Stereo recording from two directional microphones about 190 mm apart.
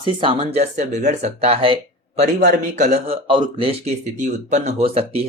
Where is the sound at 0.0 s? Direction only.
30° right (ahead or behind).